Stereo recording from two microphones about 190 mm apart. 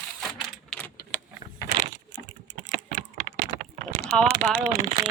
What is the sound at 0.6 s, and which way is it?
Keys jangling, 5° left (ahead or behind).